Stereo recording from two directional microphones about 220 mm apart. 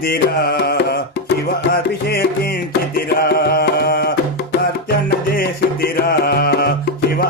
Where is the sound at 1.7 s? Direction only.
45° left (ahead or behind).